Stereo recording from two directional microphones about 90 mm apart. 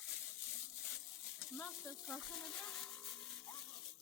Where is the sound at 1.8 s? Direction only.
35° left (ahead or behind).